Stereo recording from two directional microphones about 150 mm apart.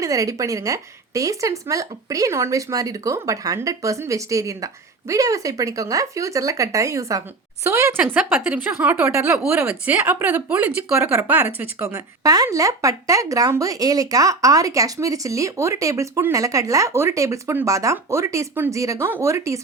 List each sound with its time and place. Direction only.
0.0 s a woman's voice: 20° right (ahead or behind)